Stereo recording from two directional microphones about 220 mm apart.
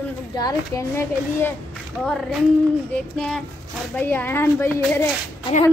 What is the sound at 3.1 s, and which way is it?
A child's voice, 5° left (ahead or behind).